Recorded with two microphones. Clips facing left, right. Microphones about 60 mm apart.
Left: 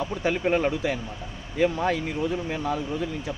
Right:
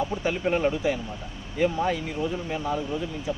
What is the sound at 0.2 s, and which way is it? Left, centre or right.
Speech, left.